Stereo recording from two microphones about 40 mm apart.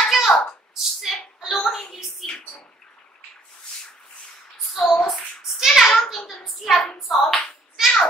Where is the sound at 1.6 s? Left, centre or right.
Centre.